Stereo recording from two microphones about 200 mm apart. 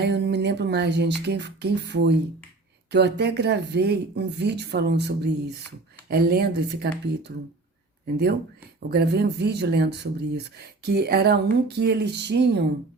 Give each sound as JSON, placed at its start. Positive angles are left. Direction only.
{"t": 0.0, "sound": "speech", "side_deg": -60}
{"t": 8.9, "sound": "speech", "side_deg": -55}